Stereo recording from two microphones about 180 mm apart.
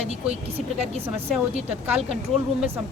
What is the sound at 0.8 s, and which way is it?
Speech, 35° right (ahead or behind).